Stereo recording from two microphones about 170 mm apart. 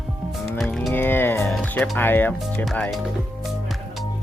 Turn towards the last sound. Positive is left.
turn(degrees=0)  # may be behind; listen again after turning